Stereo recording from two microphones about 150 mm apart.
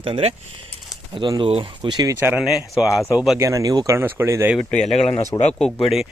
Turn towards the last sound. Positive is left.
turn(degrees=0)  # may be behind; listen again after turning